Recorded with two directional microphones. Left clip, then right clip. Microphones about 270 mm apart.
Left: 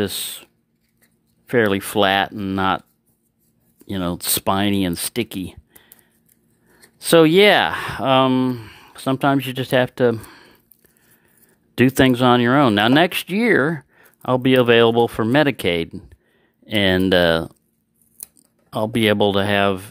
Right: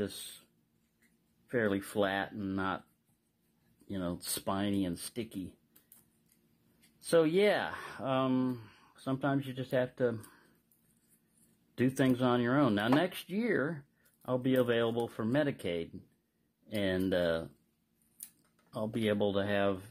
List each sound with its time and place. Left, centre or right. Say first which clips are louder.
1.5 s speech: left 15 dB; left
3.8 s speech: left 14 dB; left
7.0 s speech: left 15 dB; left
11.7 s speech: left 15 dB; left
18.7 s speech: left 15 dB; left